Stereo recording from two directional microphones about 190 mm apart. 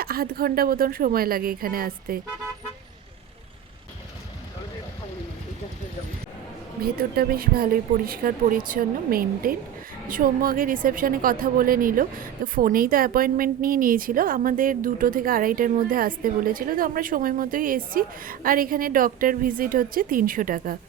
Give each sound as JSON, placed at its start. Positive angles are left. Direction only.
{"t": 0.0, "sound": "a woman's voice", "side_deg": -50}
{"t": 6.8, "sound": "a woman's voice", "side_deg": -50}